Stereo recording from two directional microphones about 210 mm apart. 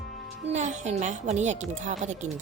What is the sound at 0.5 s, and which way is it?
Speech, 35° right (ahead or behind).